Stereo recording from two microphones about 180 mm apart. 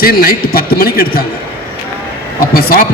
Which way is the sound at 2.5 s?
55° left (ahead or behind).